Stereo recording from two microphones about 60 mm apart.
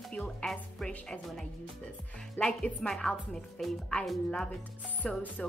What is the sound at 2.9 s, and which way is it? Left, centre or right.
Speech, centre.